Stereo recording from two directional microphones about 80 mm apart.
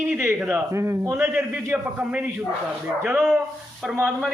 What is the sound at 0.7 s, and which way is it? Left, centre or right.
Speech, right.